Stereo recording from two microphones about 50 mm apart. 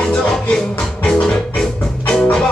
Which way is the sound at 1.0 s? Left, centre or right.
Centre.